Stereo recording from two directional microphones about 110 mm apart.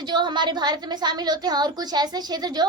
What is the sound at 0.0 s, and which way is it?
A woman's voice, 40° right (ahead or behind).